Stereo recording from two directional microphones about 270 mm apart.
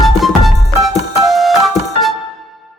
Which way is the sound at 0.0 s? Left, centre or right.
Centre.